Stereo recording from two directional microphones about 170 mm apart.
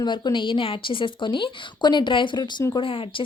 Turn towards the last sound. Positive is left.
turn(degrees=30)  # may be behind; listen again after turning